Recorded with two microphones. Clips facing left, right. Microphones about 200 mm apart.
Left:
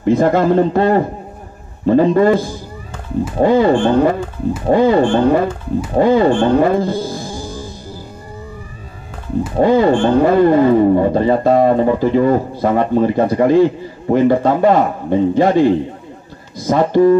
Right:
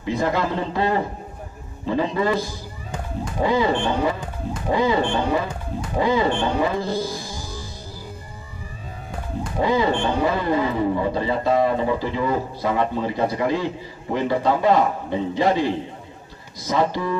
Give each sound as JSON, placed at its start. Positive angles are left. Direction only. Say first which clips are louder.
{"t": 0.0, "sound": "speech", "louder": "left 10 dB", "side_deg": 50}
{"t": 9.6, "sound": "speech", "louder": "left 8 dB", "side_deg": 50}